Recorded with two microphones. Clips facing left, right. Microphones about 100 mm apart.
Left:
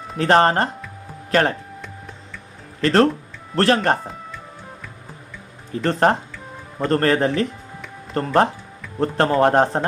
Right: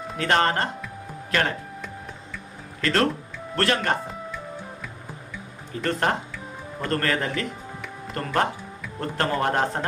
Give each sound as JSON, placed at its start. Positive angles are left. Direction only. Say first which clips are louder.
{"t": 0.2, "sound": "a man's voice", "louder": "left 6 dB", "side_deg": 35}
{"t": 2.8, "sound": "a man's voice", "louder": "left 7 dB", "side_deg": 35}
{"t": 5.8, "sound": "a man's voice", "louder": "left 6 dB", "side_deg": 35}